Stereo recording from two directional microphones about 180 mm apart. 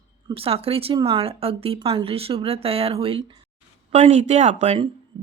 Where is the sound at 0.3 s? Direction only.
30° right (ahead or behind).